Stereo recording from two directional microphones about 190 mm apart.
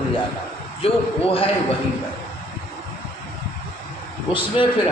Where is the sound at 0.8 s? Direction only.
30° left (ahead or behind).